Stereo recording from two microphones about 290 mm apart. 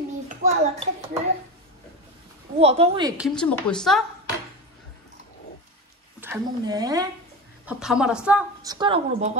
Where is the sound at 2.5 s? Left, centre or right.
Right.